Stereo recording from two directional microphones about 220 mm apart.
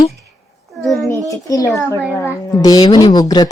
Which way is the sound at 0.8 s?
Centre (ahead or behind).